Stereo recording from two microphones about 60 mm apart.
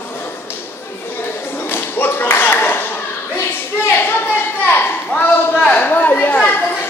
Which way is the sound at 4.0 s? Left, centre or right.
Left.